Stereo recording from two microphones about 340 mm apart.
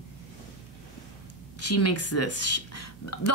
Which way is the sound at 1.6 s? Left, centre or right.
Left.